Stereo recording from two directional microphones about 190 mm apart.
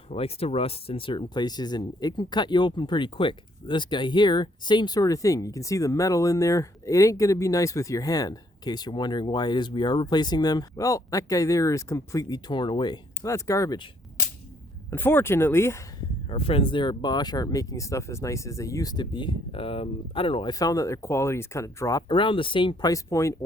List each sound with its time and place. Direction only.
0.1 s speech: 30° left (ahead or behind)
14.8 s speech: 10° left (ahead or behind)
16.3 s speech: 30° left (ahead or behind)